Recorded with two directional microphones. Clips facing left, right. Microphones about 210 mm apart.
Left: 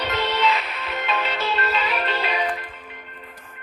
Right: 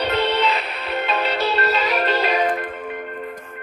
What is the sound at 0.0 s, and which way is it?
Music, 35° right (ahead or behind).